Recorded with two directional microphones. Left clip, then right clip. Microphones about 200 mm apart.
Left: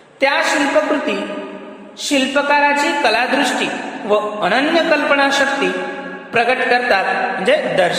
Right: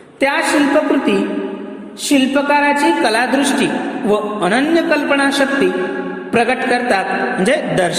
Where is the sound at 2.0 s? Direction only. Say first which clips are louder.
Right 1 dB; 25° right (ahead or behind).